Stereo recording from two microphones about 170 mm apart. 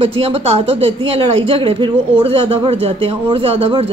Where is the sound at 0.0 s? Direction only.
35° right (ahead or behind).